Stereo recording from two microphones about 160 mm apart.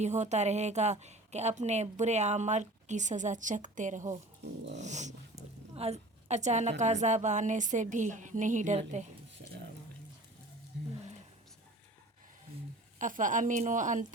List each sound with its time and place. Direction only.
0.0 s speech: 45° right (ahead or behind)
13.0 s speech: 55° right (ahead or behind)